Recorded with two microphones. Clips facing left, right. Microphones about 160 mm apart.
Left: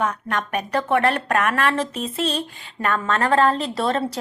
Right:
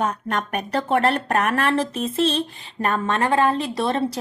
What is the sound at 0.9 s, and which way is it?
Speech, 40° right (ahead or behind).